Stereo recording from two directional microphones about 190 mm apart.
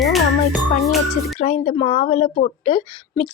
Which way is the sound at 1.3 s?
35° left (ahead or behind).